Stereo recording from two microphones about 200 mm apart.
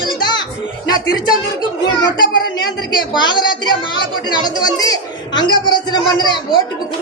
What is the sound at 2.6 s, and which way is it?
Speech, 20° left (ahead or behind).